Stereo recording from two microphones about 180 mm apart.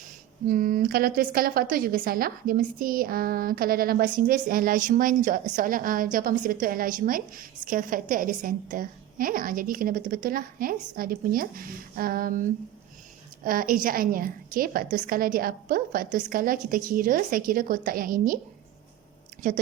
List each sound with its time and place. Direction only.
0.4 s a woman's voice: 50° right (ahead or behind)